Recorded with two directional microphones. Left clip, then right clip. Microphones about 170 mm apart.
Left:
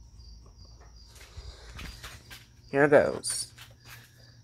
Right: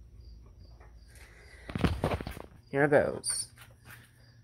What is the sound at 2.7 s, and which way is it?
Speech, 5° right (ahead or behind).